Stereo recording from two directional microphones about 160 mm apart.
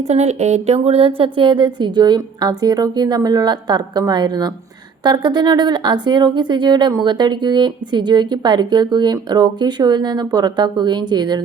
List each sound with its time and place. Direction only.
0.1 s speech: 40° right (ahead or behind); by 11.4 s 25° right (ahead or behind)